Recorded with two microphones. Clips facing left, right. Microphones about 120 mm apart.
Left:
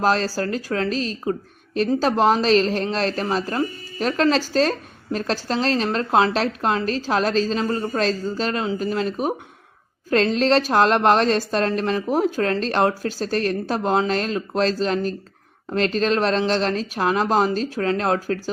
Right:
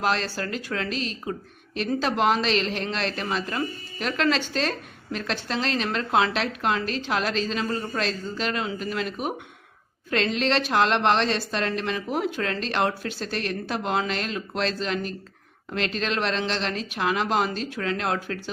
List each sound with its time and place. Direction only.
0.0 s a woman's voice: 40° left (ahead or behind)